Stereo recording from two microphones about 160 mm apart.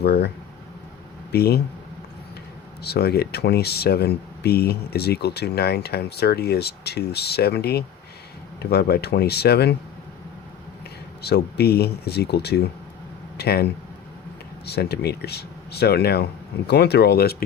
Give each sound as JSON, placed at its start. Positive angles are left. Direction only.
{"t": 0.0, "sound": "speech", "side_deg": 90}
{"t": 1.3, "sound": "speech", "side_deg": 80}
{"t": 2.8, "sound": "speech", "side_deg": 85}
{"t": 11.2, "sound": "speech", "side_deg": 90}
{"t": 14.7, "sound": "speech", "side_deg": 90}